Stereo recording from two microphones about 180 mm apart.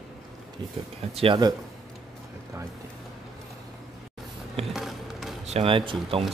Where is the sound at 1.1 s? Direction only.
30° right (ahead or behind).